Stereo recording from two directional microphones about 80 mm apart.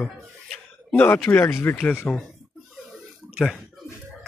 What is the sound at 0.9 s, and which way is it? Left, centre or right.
Speech, left.